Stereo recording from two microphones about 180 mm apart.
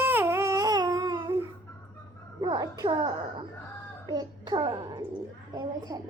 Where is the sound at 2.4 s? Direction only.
25° right (ahead or behind).